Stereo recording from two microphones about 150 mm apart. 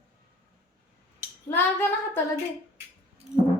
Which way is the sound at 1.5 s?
15° left (ahead or behind).